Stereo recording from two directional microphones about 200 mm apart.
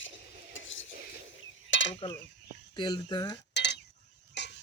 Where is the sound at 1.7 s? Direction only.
70° left (ahead or behind).